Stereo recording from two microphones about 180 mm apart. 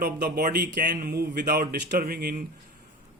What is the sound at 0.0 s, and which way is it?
Speech, 60° right (ahead or behind).